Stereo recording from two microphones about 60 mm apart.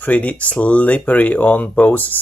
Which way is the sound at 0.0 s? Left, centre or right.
Left.